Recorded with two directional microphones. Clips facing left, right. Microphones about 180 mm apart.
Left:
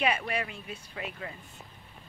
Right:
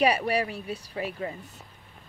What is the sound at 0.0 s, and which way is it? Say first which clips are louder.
Speech: right 6 dB; 35° right (ahead or behind).